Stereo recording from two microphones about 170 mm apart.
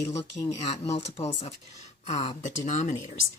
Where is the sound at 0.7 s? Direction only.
35° left (ahead or behind).